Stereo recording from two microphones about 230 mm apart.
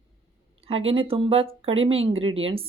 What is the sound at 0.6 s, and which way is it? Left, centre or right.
Speech, right.